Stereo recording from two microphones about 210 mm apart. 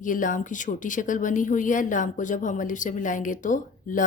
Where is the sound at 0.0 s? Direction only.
40° left (ahead or behind).